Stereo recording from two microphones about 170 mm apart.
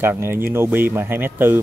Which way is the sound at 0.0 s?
15° right (ahead or behind).